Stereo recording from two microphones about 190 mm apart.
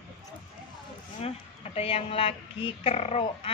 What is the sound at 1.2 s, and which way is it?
Speech, 30° left (ahead or behind).